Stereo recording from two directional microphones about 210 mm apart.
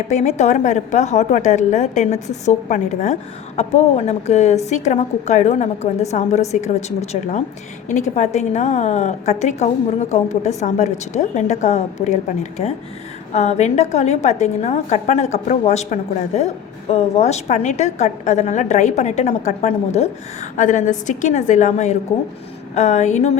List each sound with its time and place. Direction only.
0.1 s a woman's voice: 35° left (ahead or behind)